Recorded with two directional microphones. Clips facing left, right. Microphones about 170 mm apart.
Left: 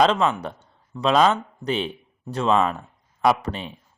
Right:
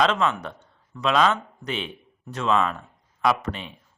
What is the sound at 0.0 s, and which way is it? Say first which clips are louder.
A man's voice: left 3 dB; 35° left (ahead or behind).